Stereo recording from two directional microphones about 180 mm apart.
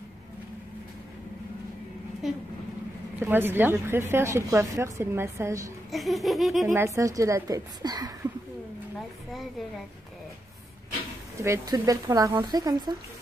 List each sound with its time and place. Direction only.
3.2 s a woman's voice: 10° right (ahead or behind)
5.9 s speech: centre (ahead or behind)
6.7 s a woman's voice: 15° right (ahead or behind)
9.3 s speech: centre (ahead or behind)
11.4 s speech: 20° right (ahead or behind)